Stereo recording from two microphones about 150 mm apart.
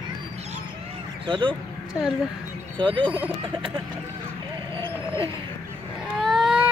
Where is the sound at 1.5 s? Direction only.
5° left (ahead or behind).